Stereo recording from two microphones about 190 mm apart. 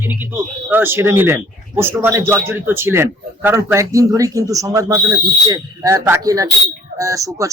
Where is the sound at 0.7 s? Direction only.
10° right (ahead or behind).